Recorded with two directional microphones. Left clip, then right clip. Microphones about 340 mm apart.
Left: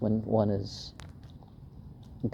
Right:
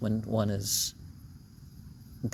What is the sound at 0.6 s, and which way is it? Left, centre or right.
Speech, right.